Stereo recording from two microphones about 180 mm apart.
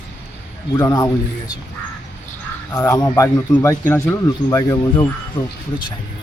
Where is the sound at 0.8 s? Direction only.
20° left (ahead or behind).